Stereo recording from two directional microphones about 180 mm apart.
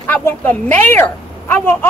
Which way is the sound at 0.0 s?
10° left (ahead or behind).